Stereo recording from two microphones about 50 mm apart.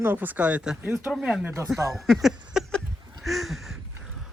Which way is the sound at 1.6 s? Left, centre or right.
Right.